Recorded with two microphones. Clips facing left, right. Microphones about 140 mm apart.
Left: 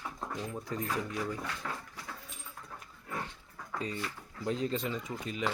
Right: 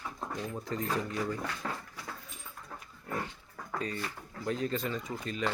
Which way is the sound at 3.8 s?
20° left (ahead or behind).